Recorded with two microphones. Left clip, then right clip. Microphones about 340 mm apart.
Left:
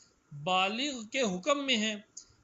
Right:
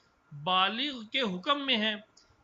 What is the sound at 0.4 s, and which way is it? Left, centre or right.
Speech, centre.